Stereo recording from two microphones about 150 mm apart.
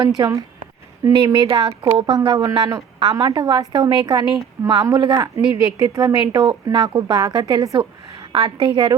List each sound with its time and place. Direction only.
0.2 s a woman's voice: 20° right (ahead or behind)